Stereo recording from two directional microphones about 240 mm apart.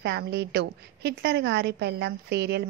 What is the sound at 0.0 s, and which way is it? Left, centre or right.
A woman's voice, right.